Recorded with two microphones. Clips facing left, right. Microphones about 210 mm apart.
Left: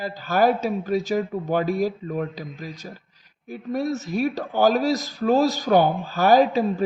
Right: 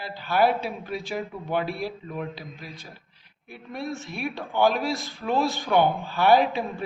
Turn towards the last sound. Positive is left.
turn(degrees=40)  # may be behind; listen again after turning